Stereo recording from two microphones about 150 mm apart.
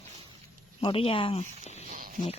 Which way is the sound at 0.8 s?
40° left (ahead or behind).